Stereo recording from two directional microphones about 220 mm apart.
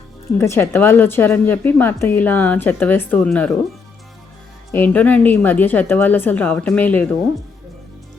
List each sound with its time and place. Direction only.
0.3 s a woman's voice: 10° left (ahead or behind)
4.7 s a woman's voice: 10° left (ahead or behind)